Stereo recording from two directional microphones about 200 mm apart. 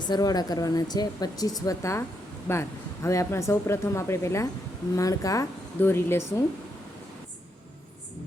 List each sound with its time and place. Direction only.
0.1 s speech: 20° left (ahead or behind)